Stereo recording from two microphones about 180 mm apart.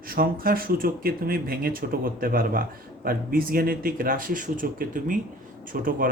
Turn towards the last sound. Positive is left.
turn(degrees=-50)  # may be behind; listen again after turning